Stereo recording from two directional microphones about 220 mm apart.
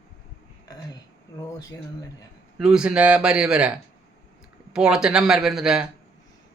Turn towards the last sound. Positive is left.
turn(degrees=0)  # may be behind; listen again after turning